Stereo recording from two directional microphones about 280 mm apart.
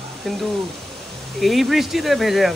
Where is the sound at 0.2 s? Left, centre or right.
Centre.